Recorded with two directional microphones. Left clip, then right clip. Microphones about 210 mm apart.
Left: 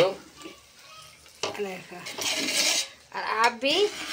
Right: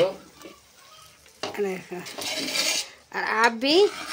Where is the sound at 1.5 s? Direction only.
40° right (ahead or behind).